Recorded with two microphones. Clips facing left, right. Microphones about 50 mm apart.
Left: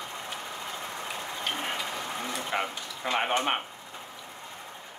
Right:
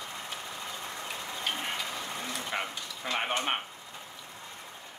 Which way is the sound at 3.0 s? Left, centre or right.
Centre.